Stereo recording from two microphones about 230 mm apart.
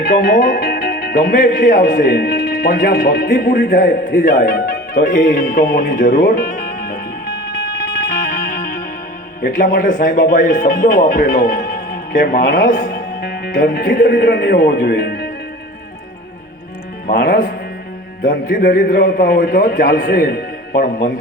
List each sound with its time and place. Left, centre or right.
0.0 s speech: left
9.4 s speech: left
17.1 s a man's voice: left